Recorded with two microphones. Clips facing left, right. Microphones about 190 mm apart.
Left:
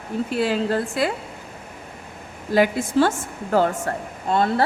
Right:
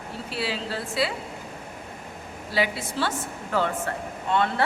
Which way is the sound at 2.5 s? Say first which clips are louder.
Left 8 dB; 50° left (ahead or behind).